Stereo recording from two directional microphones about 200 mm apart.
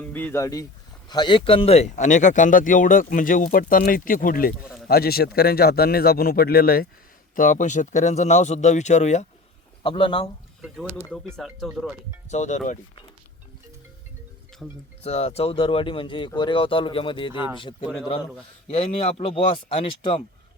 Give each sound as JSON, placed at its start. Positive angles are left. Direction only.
{"t": 0.0, "sound": "speech", "side_deg": 10}
{"t": 9.8, "sound": "speech", "side_deg": 25}
{"t": 10.6, "sound": "speech", "side_deg": -10}
{"t": 12.3, "sound": "speech", "side_deg": 35}
{"t": 14.6, "sound": "speech", "side_deg": 5}
{"t": 15.0, "sound": "speech", "side_deg": 30}